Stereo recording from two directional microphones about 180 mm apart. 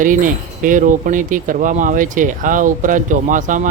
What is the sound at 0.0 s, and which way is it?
Speech, 45° right (ahead or behind).